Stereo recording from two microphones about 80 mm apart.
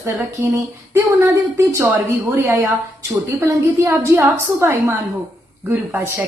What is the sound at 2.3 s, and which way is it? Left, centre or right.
A woman's voice, right.